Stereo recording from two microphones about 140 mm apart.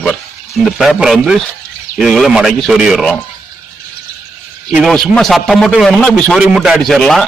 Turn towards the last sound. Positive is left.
turn(degrees=0)  # may be behind; listen again after turning